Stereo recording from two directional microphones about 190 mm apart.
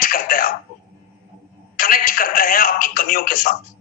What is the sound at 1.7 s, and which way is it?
Speech, 50° left (ahead or behind).